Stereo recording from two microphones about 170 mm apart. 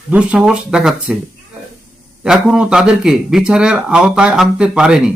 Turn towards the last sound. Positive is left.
turn(degrees=-5)  # may be behind; listen again after turning